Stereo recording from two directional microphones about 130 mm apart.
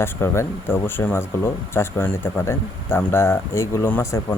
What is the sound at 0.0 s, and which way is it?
Speech, 20° left (ahead or behind).